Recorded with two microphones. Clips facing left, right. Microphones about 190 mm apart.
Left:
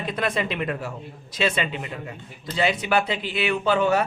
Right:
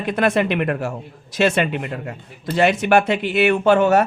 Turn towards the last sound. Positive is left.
turn(degrees=-50)  # may be behind; listen again after turning